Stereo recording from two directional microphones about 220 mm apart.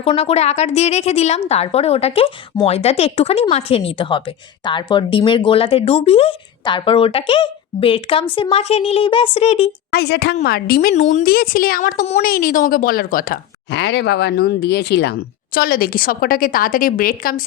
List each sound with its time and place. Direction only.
0.0 s speech: 25° left (ahead or behind)
9.9 s a woman's voice: 45° left (ahead or behind)
10.9 s a woman's voice: 30° left (ahead or behind)